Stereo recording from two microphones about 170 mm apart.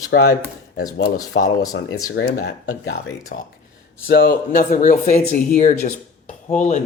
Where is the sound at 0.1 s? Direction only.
70° left (ahead or behind).